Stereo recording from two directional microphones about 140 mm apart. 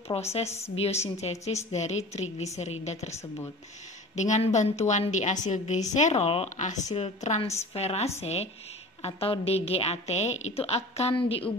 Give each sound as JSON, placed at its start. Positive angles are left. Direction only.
{"t": 0.1, "sound": "a woman's voice", "side_deg": 40}
{"t": 3.1, "sound": "speech", "side_deg": 20}
{"t": 4.1, "sound": "a woman's voice", "side_deg": 55}
{"t": 7.7, "sound": "a woman's voice", "side_deg": 50}